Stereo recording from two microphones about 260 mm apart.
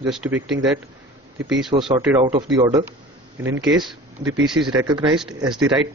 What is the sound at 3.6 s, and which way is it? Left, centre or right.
Speech, centre.